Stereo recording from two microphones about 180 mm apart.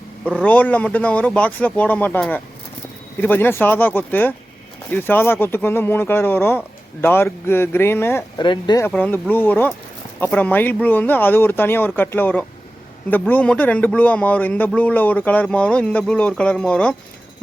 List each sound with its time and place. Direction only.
0.3 s speech: 5° left (ahead or behind)
8.4 s speech: 25° left (ahead or behind)
8.9 s speech: 10° left (ahead or behind)